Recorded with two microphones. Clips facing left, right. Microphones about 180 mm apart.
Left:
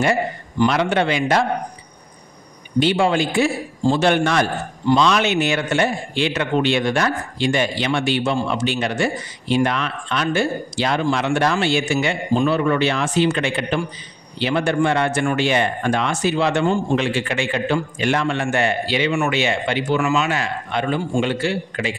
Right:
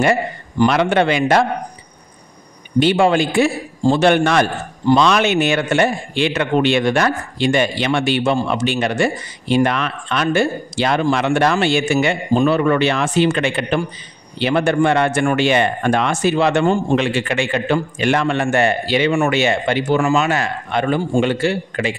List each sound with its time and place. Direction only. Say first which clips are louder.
0.6 s a man's voice: right 3 dB; 60° right (ahead or behind)
2.8 s a man's voice: right 3 dB; 55° right (ahead or behind)